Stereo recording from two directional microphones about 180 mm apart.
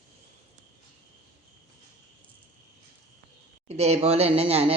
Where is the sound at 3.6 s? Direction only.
35° right (ahead or behind).